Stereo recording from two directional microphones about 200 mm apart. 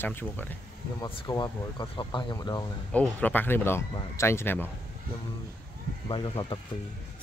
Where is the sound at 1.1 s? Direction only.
20° left (ahead or behind).